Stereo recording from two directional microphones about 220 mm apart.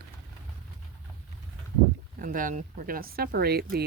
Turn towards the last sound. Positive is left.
turn(degrees=-45)  # may be behind; listen again after turning